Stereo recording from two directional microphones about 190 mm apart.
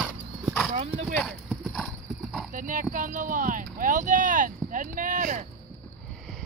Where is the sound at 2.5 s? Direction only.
45° right (ahead or behind).